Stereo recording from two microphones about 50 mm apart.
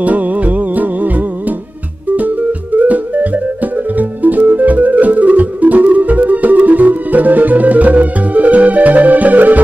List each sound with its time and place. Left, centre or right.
0.0 s music: right